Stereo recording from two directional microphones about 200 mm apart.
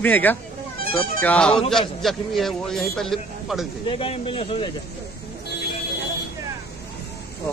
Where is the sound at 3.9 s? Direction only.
25° left (ahead or behind).